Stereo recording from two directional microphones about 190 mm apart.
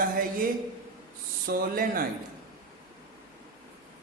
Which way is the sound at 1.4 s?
50° right (ahead or behind).